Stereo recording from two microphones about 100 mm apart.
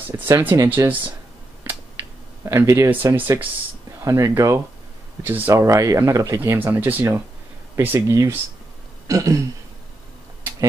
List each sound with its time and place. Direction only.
0.1 s speech: 20° right (ahead or behind)
2.4 s speech: 30° right (ahead or behind)
2.9 s speech: 20° right (ahead or behind)
4.0 s speech: 30° right (ahead or behind)
5.5 s speech: 30° right (ahead or behind)
6.6 s speech: 20° right (ahead or behind)
9.0 s throat clearing: 35° right (ahead or behind)